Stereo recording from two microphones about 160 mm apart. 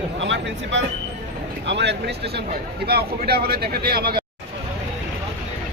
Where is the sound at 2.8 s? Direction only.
75° right (ahead or behind).